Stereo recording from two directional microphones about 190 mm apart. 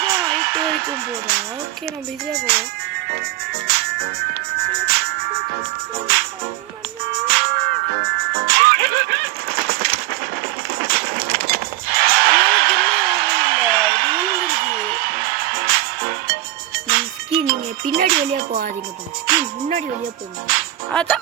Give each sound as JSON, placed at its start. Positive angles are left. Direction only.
{"t": 0.0, "sound": "speech", "side_deg": -55}
{"t": 3.5, "sound": "music", "side_deg": -55}
{"t": 7.3, "sound": "music", "side_deg": -55}
{"t": 10.8, "sound": "a sound", "side_deg": -50}
{"t": 16.8, "sound": "music", "side_deg": -50}
{"t": 20.5, "sound": "music", "side_deg": -50}
{"t": 20.9, "sound": "speech", "side_deg": 5}